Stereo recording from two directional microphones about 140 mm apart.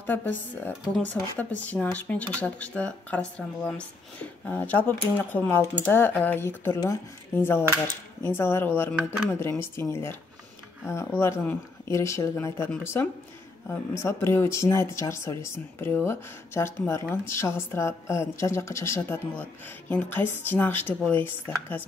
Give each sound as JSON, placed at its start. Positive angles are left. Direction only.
{"t": 0.0, "sound": "speech", "side_deg": 15}
{"t": 8.9, "sound": "speech", "side_deg": -10}
{"t": 9.3, "sound": "speech", "side_deg": 15}